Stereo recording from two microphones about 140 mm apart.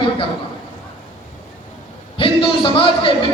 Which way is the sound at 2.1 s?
35° left (ahead or behind).